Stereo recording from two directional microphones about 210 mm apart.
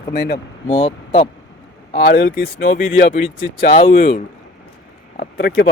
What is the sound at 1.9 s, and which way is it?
Speech, 45° left (ahead or behind).